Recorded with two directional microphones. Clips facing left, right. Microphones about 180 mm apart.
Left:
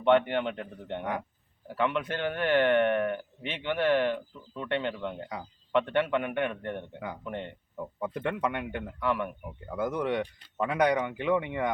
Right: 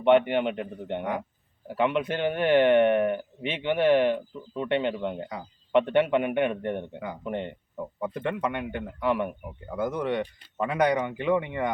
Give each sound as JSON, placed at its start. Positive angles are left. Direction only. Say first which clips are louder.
{"t": 0.0, "sound": "speech", "louder": "right 3 dB", "side_deg": -15}
{"t": 8.0, "sound": "speech", "louder": "right 1 dB", "side_deg": 0}
{"t": 9.0, "sound": "speech", "louder": "right 4 dB", "side_deg": -20}
{"t": 9.7, "sound": "speech", "louder": "right 2 dB", "side_deg": 0}